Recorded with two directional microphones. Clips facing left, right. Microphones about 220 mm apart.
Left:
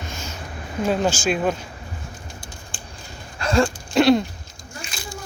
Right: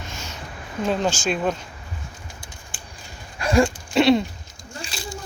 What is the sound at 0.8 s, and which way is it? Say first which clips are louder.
Speech: left 2 dB; 5° left (ahead or behind).